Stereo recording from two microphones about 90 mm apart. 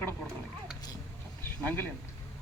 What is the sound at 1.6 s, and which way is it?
Speech, 20° left (ahead or behind).